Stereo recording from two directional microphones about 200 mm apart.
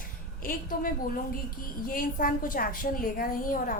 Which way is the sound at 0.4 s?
45° left (ahead or behind).